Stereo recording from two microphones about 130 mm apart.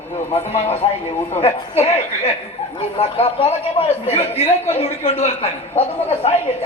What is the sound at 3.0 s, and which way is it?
A man's voice, 45° left (ahead or behind).